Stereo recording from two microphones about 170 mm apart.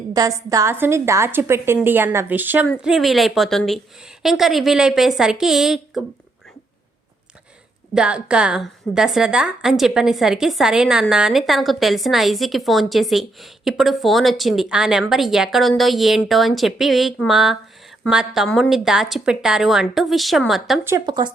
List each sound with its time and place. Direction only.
0.1 s a woman's voice: 20° right (ahead or behind); by 6.1 s centre (ahead or behind)
7.9 s a woman's voice: 5° right (ahead or behind)
20.8 s speech: 20° right (ahead or behind)